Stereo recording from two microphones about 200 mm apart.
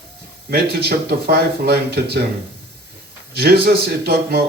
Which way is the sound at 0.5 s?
50° right (ahead or behind).